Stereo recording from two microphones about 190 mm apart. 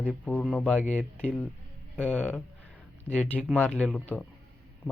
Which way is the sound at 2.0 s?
5° left (ahead or behind).